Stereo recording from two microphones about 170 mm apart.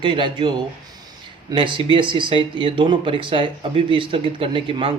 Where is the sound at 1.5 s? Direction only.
30° right (ahead or behind).